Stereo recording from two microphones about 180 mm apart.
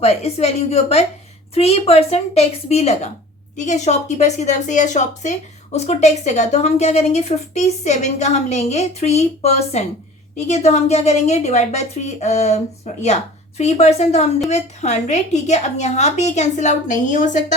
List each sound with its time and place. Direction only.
0.0 s a woman's voice: 35° left (ahead or behind)